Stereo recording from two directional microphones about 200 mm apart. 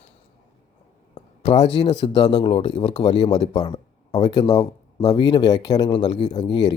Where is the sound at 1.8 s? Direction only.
30° left (ahead or behind).